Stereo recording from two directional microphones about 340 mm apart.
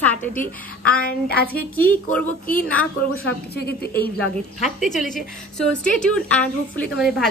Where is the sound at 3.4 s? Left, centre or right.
Left.